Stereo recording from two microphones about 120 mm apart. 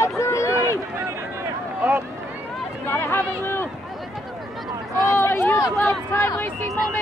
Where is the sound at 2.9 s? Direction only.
20° left (ahead or behind).